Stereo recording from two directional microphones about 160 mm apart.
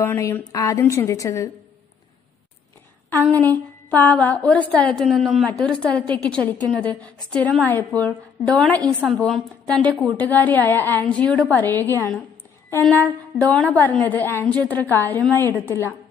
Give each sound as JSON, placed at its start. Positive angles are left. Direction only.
{"t": 0.0, "sound": "a woman's voice", "side_deg": 15}
{"t": 3.1, "sound": "a woman's voice", "side_deg": 15}
{"t": 13.5, "sound": "a woman's voice", "side_deg": 10}